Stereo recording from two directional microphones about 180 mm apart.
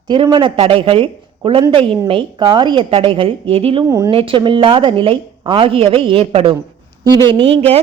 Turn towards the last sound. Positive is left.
turn(degrees=-35)  # may be behind; listen again after turning